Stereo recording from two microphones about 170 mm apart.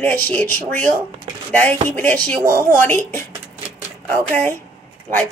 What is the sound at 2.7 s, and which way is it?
A woman's voice, 10° left (ahead or behind).